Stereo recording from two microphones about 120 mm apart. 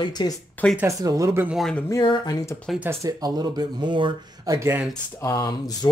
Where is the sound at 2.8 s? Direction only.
20° right (ahead or behind).